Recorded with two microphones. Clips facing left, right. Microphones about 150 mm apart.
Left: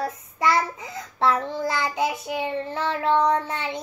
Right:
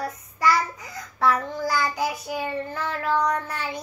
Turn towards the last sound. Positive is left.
turn(degrees=25)  # may be behind; listen again after turning